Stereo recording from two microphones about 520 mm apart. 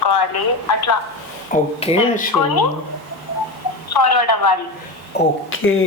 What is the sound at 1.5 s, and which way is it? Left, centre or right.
Speech, centre.